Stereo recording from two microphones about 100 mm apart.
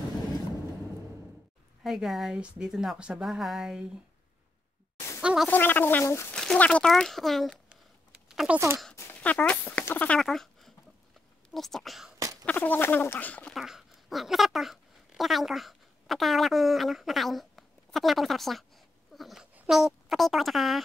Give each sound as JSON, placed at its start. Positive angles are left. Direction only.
{"t": 1.8, "sound": "speech", "side_deg": -5}
{"t": 5.2, "sound": "a sound", "side_deg": -10}
{"t": 5.5, "sound": "speech", "side_deg": 20}
{"t": 6.3, "sound": "speech", "side_deg": 5}
{"t": 7.7, "sound": "a sound", "side_deg": -10}
{"t": 8.5, "sound": "speech", "side_deg": -25}
{"t": 9.1, "sound": "speech", "side_deg": 15}
{"t": 10.2, "sound": "a sound", "side_deg": 0}
{"t": 11.5, "sound": "speech", "side_deg": 0}
{"t": 12.4, "sound": "fowl", "side_deg": 15}
{"t": 13.5, "sound": "speech", "side_deg": -5}